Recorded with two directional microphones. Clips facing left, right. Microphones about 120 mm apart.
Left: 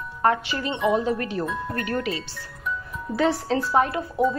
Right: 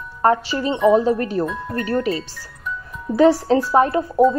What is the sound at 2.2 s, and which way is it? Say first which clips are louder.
Speech: even; centre (ahead or behind).